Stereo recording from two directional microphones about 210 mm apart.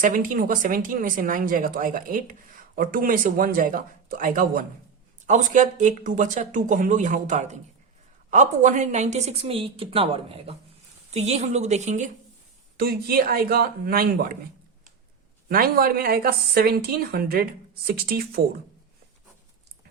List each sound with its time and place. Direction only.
0.0 s a woman's voice: 40° right (ahead or behind)
12.7 s a woman's voice: 45° right (ahead or behind)
15.4 s a woman's voice: 45° right (ahead or behind)